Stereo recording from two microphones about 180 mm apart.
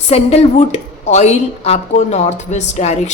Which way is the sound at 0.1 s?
35° left (ahead or behind).